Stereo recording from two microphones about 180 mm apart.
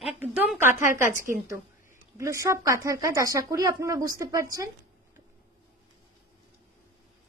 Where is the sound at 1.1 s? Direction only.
45° right (ahead or behind).